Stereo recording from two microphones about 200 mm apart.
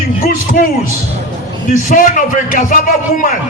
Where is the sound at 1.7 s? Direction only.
40° left (ahead or behind).